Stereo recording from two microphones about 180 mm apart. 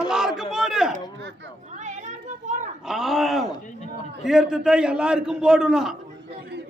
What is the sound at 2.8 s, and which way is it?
A man's voice, centre (ahead or behind).